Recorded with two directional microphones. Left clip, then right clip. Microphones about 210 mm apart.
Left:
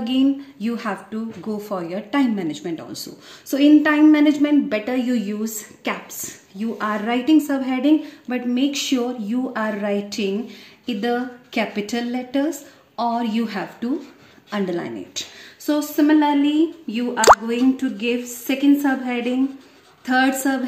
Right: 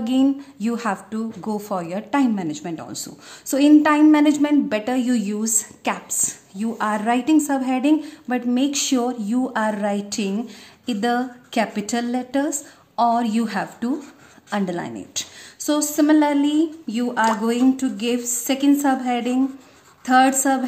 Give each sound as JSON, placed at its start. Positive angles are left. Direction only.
{"t": 0.0, "sound": "a woman's voice", "side_deg": -30}